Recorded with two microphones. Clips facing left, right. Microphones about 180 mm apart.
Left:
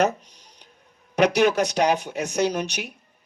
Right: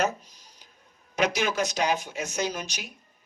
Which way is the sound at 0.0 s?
65° left (ahead or behind).